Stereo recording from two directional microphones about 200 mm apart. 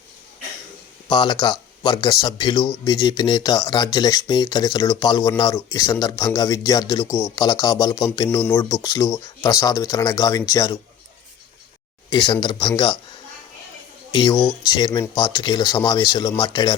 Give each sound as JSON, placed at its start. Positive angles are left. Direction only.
{"t": 1.0, "sound": "a man's voice", "side_deg": 20}
{"t": 12.1, "sound": "a man's voice", "side_deg": 25}